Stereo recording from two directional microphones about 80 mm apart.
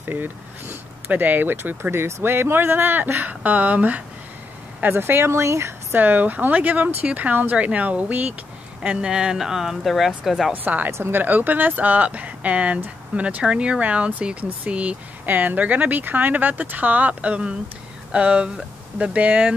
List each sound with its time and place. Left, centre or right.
0.0 s speech: right
5.9 s speech: right; by 10.5 s centre
10.5 s speech: right